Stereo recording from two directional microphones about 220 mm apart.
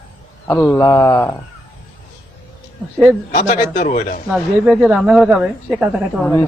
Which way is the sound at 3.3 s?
40° left (ahead or behind).